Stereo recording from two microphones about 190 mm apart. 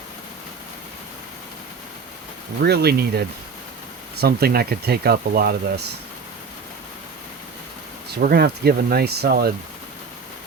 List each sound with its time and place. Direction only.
2.6 s speech: 60° right (ahead or behind)
8.1 s speech: 55° right (ahead or behind)